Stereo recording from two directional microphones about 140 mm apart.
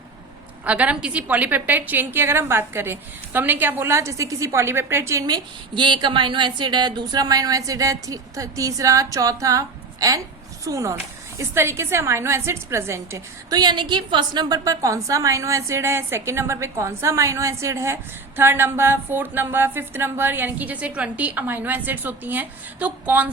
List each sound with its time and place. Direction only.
0.6 s a woman's voice: 10° right (ahead or behind)